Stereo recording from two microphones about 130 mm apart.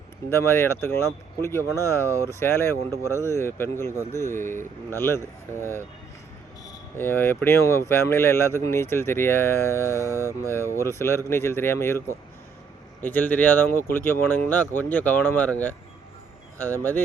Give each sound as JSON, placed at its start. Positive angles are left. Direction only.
{"t": 0.3, "sound": "speech", "side_deg": 20}
{"t": 7.0, "sound": "speech", "side_deg": 15}
{"t": 10.1, "sound": "mantra", "side_deg": -20}
{"t": 10.7, "sound": "speech", "side_deg": 20}